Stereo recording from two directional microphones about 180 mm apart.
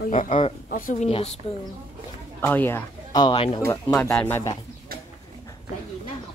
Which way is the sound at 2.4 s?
10° left (ahead or behind).